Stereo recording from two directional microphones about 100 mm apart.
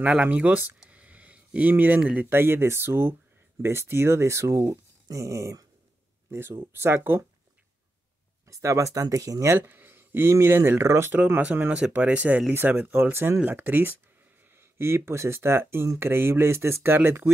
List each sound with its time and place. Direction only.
0.1 s speech: 15° right (ahead or behind)
8.5 s speech: 30° right (ahead or behind)
9.6 s speech: 20° right (ahead or behind)